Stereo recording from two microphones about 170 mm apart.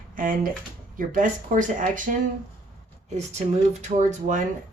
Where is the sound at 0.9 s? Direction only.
50° right (ahead or behind).